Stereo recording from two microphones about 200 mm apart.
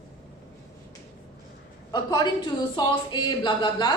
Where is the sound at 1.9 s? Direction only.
20° left (ahead or behind).